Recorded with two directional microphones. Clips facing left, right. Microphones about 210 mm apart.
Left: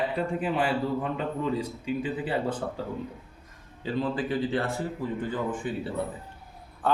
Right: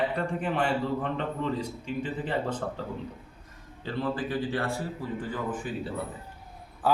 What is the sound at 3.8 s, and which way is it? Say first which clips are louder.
Speech: left 2 dB; 20° left (ahead or behind).